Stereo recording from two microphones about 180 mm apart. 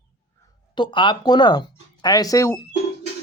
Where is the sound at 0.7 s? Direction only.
25° left (ahead or behind).